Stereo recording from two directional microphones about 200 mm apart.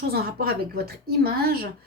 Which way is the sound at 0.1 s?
50° right (ahead or behind).